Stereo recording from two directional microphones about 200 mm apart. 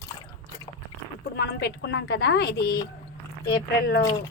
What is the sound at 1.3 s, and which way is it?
A woman's voice, 55° left (ahead or behind).